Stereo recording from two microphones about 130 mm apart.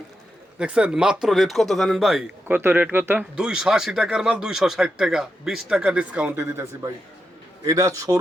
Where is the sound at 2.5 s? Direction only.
15° right (ahead or behind).